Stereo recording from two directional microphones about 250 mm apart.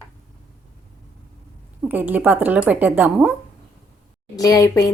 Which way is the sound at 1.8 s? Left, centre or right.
Centre.